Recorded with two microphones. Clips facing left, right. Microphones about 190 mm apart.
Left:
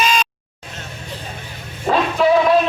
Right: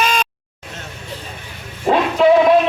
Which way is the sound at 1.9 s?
20° right (ahead or behind).